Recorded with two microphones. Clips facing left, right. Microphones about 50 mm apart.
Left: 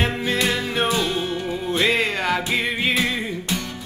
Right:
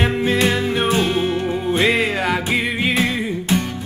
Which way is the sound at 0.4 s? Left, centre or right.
Centre.